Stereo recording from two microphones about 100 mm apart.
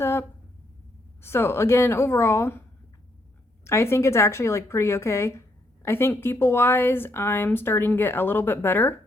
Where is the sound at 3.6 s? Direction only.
25° left (ahead or behind).